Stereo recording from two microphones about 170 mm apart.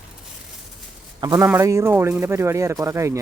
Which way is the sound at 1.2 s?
25° right (ahead or behind).